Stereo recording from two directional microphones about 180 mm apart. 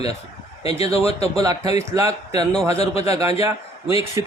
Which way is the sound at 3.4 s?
15° right (ahead or behind).